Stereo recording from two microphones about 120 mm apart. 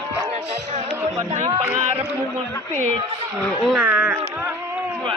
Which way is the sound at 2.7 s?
85° right.